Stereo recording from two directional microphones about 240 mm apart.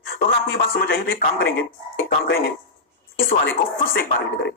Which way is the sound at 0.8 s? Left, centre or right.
Left.